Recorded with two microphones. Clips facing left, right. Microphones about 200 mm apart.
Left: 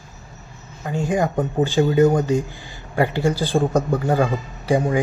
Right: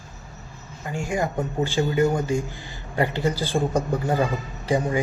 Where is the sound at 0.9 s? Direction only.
20° left (ahead or behind).